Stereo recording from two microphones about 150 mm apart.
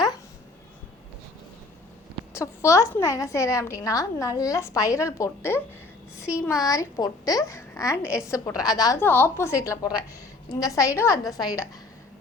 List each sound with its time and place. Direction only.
2.3 s a woman's voice: 20° left (ahead or behind)
9.0 s a woman's voice: 15° left (ahead or behind)